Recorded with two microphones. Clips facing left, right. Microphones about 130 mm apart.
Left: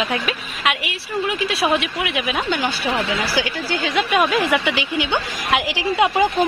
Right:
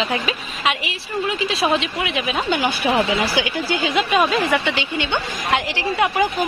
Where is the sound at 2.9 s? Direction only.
30° right (ahead or behind).